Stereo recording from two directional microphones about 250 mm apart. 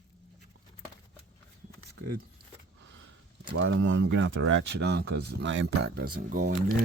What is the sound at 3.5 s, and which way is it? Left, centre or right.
Speech, right.